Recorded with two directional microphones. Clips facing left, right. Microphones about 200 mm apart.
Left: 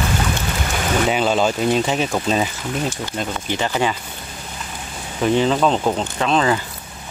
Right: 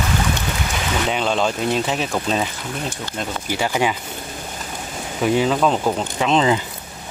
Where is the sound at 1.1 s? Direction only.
5° left (ahead or behind).